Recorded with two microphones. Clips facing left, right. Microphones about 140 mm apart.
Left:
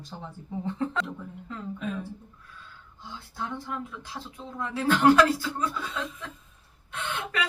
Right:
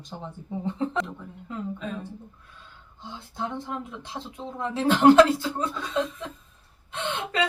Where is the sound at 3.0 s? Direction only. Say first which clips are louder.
Right 3 dB; 20° right (ahead or behind).